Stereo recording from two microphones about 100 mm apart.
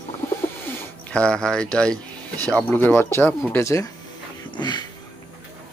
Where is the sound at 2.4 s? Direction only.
15° left (ahead or behind); by 3.9 s 30° left (ahead or behind).